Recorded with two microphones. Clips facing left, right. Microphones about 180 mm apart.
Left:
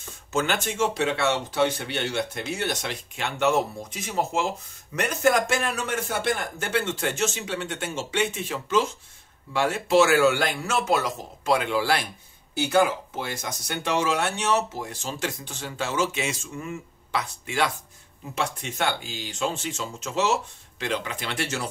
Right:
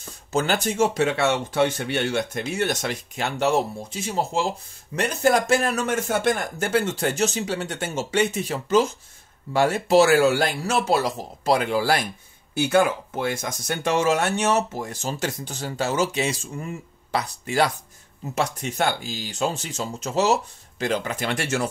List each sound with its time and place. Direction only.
0.3 s speech: 35° right (ahead or behind)
12.6 s speech: 50° right (ahead or behind)